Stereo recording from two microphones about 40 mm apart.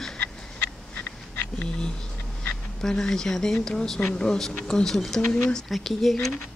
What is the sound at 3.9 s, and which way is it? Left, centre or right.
Speech, left.